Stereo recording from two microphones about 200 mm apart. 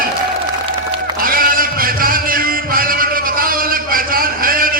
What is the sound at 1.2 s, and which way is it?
Music, 45° right (ahead or behind).